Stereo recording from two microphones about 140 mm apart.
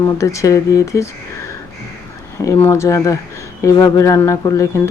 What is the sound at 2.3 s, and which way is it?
Speech, 20° left (ahead or behind).